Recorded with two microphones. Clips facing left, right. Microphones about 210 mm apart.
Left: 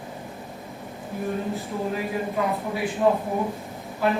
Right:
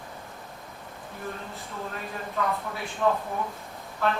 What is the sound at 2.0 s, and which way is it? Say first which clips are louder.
Speech: left 3 dB; 15° left (ahead or behind).